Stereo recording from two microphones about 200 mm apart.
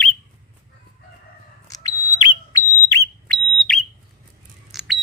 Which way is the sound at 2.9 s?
15° left (ahead or behind).